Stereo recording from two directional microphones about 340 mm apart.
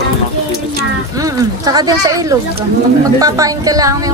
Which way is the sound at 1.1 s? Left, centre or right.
Centre.